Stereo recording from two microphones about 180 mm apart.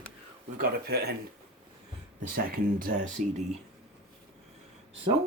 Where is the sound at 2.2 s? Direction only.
50° right (ahead or behind).